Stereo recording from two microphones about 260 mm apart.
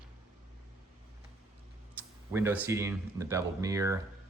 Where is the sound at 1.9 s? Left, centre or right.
Centre.